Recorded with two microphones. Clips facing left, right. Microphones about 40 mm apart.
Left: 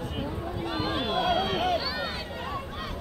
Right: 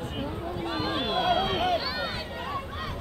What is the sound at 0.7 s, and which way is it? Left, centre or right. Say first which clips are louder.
Run: even; centre.